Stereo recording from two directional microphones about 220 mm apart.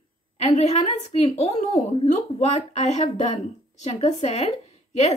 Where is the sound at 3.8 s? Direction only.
30° left (ahead or behind).